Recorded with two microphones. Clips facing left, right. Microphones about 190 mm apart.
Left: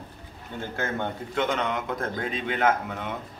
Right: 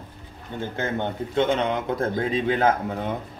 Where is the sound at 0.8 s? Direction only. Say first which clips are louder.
Right 3 dB; 25° right (ahead or behind).